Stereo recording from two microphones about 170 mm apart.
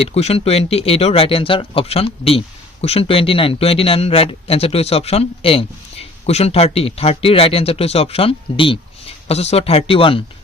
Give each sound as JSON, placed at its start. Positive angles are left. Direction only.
{"t": 0.0, "sound": "speech", "side_deg": 35}